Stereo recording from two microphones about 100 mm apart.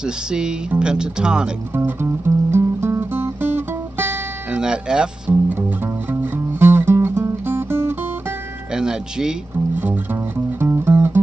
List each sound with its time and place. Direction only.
0.3 s speech: 10° right (ahead or behind)
1.8 s music: 25° right (ahead or behind)
4.6 s speech: 10° right (ahead or behind)
6.6 s music: 25° right (ahead or behind)
8.7 s music: 5° right (ahead or behind)
10.6 s music: 20° right (ahead or behind)